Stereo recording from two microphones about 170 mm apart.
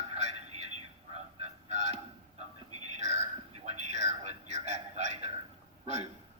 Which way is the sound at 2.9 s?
40° right (ahead or behind).